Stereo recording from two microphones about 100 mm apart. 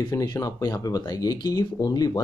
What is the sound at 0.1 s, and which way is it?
Speech, 40° left (ahead or behind).